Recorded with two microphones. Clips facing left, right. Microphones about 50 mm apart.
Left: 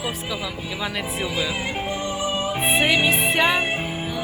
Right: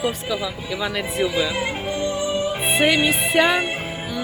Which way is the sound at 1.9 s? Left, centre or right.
Centre.